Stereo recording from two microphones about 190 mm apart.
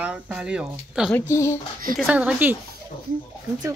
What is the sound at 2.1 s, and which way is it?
Speech, 5° right (ahead or behind).